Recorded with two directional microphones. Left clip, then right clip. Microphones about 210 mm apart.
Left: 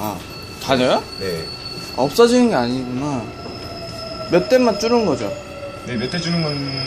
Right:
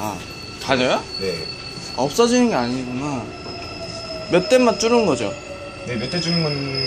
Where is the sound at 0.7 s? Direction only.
15° left (ahead or behind).